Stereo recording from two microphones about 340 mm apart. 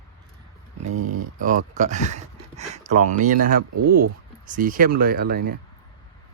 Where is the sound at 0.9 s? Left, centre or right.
Right.